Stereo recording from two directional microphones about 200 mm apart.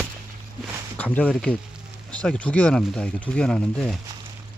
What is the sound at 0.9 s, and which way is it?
Speech, 5° left (ahead or behind).